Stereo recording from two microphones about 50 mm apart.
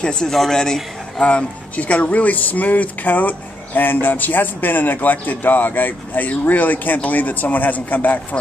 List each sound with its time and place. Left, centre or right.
0.0 s a man's voice: centre
1.2 s speech: left